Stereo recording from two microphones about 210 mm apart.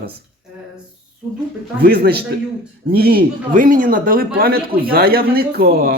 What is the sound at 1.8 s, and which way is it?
A man's voice, 50° right (ahead or behind).